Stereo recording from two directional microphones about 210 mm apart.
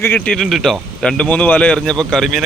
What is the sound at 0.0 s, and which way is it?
A man's voice, 5° left (ahead or behind).